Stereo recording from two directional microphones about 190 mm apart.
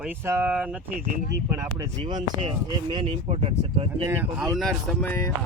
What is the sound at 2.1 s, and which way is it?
Speech, 30° right (ahead or behind).